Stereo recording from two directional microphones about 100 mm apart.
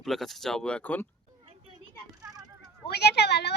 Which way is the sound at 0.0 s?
Centre (ahead or behind).